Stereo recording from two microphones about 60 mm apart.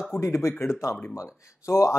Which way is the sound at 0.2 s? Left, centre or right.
Left.